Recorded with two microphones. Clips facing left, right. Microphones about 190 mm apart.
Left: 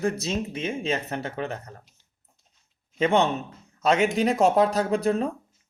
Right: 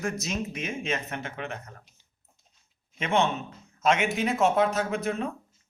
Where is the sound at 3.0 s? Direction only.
35° left (ahead or behind).